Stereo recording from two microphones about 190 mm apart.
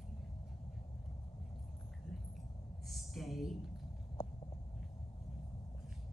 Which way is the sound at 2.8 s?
Centre (ahead or behind).